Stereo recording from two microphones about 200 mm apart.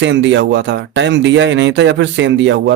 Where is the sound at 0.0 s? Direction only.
65° right (ahead or behind).